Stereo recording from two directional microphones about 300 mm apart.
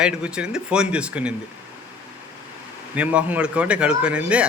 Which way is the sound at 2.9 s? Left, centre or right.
Centre.